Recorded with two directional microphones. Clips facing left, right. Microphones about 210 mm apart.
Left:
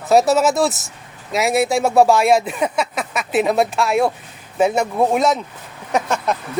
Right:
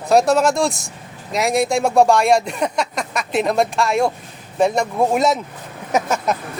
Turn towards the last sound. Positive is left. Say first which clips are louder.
# right 1 dB
turn(degrees=-5)  # may be behind; listen again after turning